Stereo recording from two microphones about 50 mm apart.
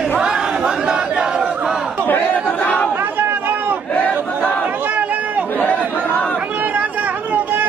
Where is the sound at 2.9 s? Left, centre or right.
Right.